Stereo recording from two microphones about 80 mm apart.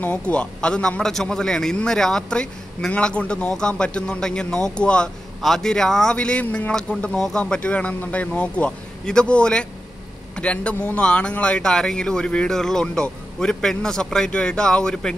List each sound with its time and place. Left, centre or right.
0.0 s a man's voice: centre